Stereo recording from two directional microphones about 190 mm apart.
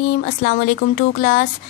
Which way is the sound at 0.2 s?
50° left (ahead or behind).